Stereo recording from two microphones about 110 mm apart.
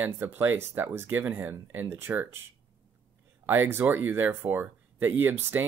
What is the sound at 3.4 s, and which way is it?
Speech, 20° right (ahead or behind).